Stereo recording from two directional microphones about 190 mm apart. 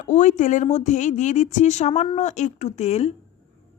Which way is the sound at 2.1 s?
35° left (ahead or behind).